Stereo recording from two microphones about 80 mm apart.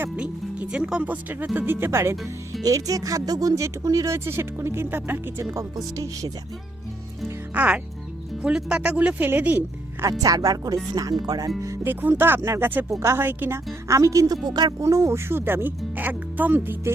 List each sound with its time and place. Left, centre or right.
0.2 s speech: centre; by 2.3 s right
2.6 s speech: right
5.5 s speech: right
7.5 s speech: centre
10.1 s speech: right
11.6 s music: right
11.9 s speech: right
13.8 s speech: right
14.4 s speech: right
14.8 s speech: right